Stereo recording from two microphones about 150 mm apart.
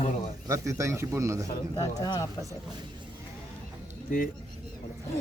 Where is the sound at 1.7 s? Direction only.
25° left (ahead or behind).